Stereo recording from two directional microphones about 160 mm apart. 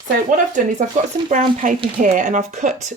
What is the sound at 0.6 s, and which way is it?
Speech, 55° right (ahead or behind).